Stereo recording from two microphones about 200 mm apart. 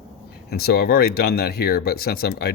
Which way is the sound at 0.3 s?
50° left (ahead or behind).